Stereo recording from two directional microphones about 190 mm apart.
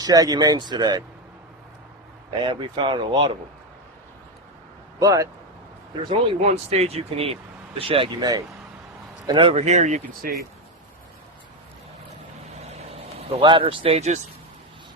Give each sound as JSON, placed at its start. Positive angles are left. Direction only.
{"t": 0.0, "sound": "speech", "side_deg": -20}
{"t": 2.3, "sound": "speech", "side_deg": -25}
{"t": 4.9, "sound": "speech", "side_deg": -15}
{"t": 6.1, "sound": "speech", "side_deg": -30}
{"t": 12.6, "sound": "vehicle", "side_deg": -35}